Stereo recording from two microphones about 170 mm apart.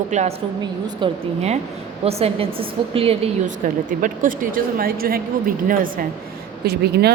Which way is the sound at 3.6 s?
50° right (ahead or behind).